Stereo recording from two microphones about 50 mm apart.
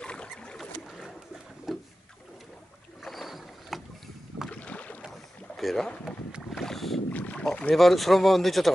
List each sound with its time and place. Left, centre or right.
0.0 s rowboat: left
1.7 s boat: centre
3.0 s rowboat: centre
4.5 s boat: left
5.0 s boat: centre
6.1 s boat: left
6.5 s boat: centre
7.1 s boat: left
7.3 s speech: left
7.7 s speech: centre